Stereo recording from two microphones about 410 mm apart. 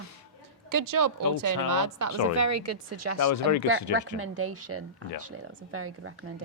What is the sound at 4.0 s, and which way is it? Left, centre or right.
Speech, right.